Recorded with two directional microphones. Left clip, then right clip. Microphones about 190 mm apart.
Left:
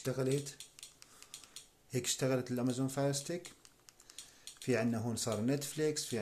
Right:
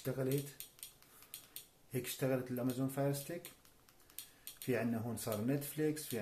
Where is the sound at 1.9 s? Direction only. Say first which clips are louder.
Left 3 dB; 50° left (ahead or behind).